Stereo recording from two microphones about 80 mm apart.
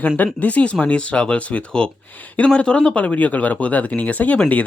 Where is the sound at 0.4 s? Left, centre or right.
Centre.